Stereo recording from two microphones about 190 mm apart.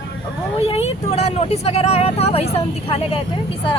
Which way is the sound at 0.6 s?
30° left (ahead or behind).